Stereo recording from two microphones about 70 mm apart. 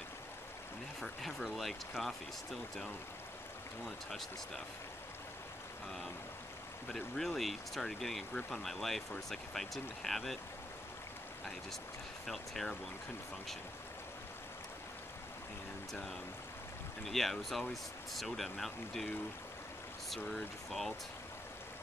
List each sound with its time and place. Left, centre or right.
1.0 s speech: centre
3.8 s speech: centre
6.9 s speech: centre
12.3 s speech: centre
17.1 s speech: centre
20.3 s speech: centre